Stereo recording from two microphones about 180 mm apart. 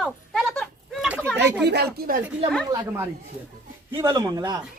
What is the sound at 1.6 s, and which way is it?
Speech, 65° right (ahead or behind).